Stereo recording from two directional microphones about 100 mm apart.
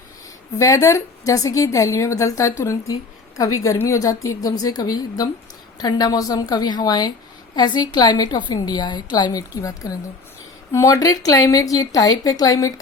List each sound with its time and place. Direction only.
0.6 s a woman's voice: 35° left (ahead or behind)